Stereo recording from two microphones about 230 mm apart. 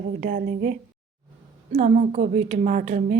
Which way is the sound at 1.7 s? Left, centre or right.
Right.